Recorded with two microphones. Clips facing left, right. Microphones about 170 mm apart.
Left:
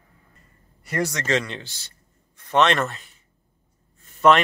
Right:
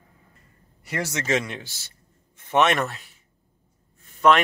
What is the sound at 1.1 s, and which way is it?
Speech, 10° right (ahead or behind).